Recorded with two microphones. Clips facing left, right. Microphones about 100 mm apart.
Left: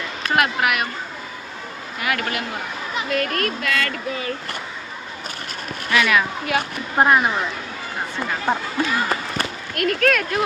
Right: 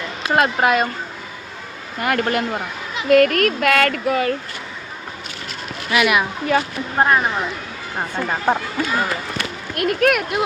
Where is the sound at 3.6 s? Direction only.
60° right (ahead or behind).